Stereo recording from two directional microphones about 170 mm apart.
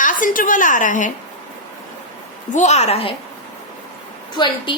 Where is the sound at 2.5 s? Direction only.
40° left (ahead or behind).